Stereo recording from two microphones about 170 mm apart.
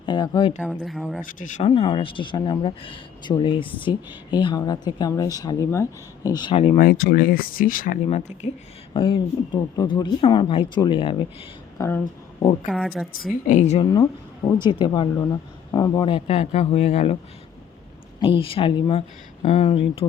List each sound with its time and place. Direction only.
0.0 s speech: 30° left (ahead or behind)
0.6 s a woman's voice: 5° right (ahead or behind)
1.2 s speech: 50° left (ahead or behind)
1.7 s speech: 30° left (ahead or behind)
6.7 s speech: 60° left (ahead or behind)
8.0 s a man's voice: 40° left (ahead or behind)
8.9 s speech: 30° left (ahead or behind)
11.8 s speech: 15° left (ahead or behind)
12.6 s a woman's voice: centre (ahead or behind)
13.5 s speech: 45° left (ahead or behind)
14.6 s a man's voice: 30° left (ahead or behind)
18.3 s a man's voice: 30° left (ahead or behind)